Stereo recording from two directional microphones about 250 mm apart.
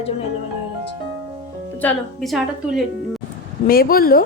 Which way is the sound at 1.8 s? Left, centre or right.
Centre.